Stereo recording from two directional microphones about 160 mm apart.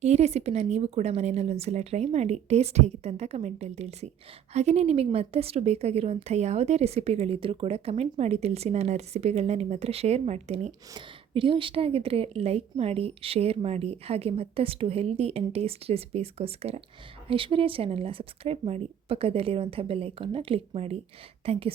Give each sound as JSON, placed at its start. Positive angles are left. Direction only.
{"t": 0.0, "sound": "a woman's voice", "side_deg": -45}
{"t": 10.9, "sound": "a woman's voice", "side_deg": -30}